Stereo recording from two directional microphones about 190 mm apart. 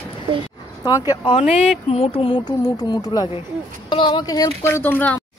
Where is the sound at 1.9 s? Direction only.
30° left (ahead or behind); by 5.2 s 10° left (ahead or behind).